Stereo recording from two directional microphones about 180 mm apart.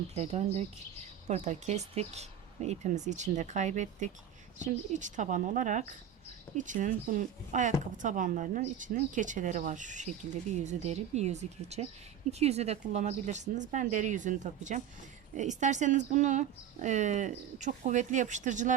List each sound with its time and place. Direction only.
0.1 s speech: 35° right (ahead or behind)